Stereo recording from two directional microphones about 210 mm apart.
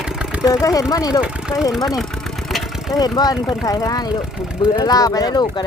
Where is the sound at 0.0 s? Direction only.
5° right (ahead or behind).